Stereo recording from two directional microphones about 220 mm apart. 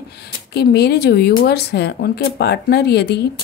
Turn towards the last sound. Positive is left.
turn(degrees=50)  # may be behind; listen again after turning